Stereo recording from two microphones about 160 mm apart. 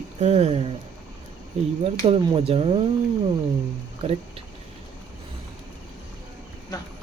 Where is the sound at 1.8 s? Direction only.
40° right (ahead or behind).